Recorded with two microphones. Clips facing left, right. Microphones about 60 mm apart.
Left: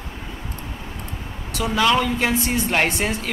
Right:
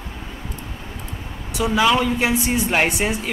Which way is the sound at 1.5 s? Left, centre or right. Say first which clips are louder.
Right 1 dB; centre.